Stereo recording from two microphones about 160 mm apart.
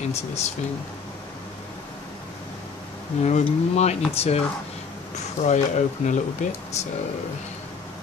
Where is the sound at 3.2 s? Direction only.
45° left (ahead or behind).